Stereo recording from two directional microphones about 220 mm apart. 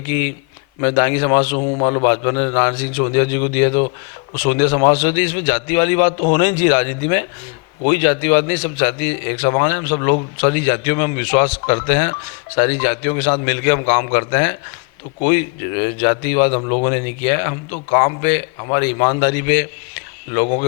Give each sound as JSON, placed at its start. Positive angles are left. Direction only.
{"t": 0.1, "sound": "a man's voice", "side_deg": 15}
{"t": 1.5, "sound": "a man's voice", "side_deg": 30}
{"t": 16.5, "sound": "a man's voice", "side_deg": 30}
{"t": 16.9, "sound": "a man's voice", "side_deg": 15}